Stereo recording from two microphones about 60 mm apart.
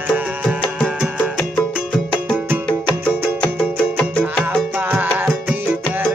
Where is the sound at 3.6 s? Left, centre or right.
Centre.